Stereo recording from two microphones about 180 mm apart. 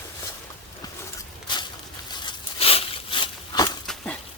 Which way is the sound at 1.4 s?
25° left (ahead or behind).